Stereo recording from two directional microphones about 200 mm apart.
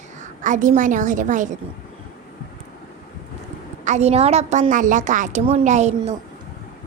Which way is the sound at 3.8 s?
35° right (ahead or behind).